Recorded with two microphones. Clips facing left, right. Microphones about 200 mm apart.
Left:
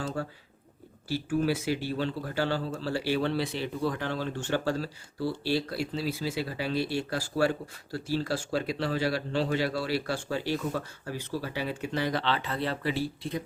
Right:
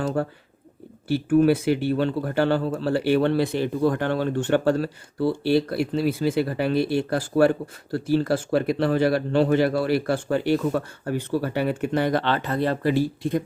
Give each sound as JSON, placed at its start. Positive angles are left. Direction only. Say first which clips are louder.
{"t": 1.0, "sound": "speech", "louder": "right 10 dB", "side_deg": -60}